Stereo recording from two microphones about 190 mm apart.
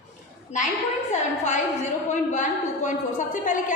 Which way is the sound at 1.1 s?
40° left (ahead or behind).